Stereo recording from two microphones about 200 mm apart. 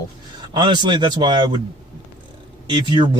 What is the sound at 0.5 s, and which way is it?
Speech, 25° right (ahead or behind).